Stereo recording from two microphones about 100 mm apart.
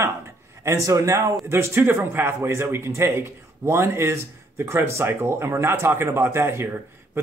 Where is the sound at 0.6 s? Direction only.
30° right (ahead or behind).